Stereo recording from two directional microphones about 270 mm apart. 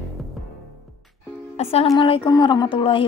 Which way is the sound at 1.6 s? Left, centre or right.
Left.